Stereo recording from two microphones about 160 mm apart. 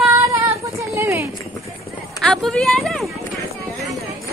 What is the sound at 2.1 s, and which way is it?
Speech, centre (ahead or behind).